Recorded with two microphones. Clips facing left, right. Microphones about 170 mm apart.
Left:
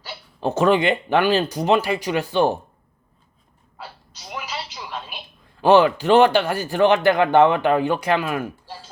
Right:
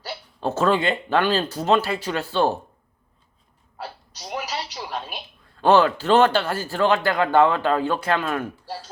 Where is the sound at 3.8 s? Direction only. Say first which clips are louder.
Right 4 dB; 40° right (ahead or behind).